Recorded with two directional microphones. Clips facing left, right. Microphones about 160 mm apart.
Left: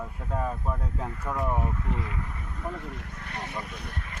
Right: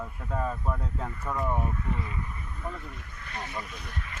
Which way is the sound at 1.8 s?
80° left.